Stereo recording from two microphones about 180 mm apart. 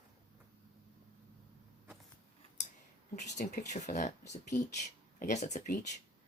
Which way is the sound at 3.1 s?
40° left (ahead or behind).